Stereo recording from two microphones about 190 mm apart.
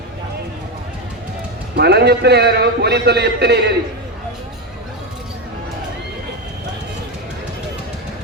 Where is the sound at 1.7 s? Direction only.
60° right (ahead or behind).